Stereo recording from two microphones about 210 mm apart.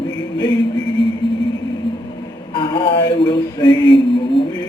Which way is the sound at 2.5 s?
25° left (ahead or behind).